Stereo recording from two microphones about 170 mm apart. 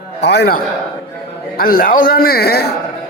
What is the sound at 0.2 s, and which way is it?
Speech, 80° left.